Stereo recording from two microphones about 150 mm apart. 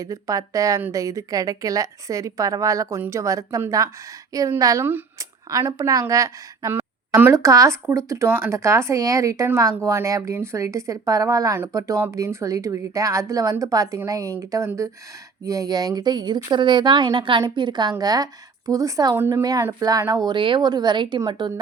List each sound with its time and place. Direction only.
0.0 s a woman's voice: 20° right (ahead or behind)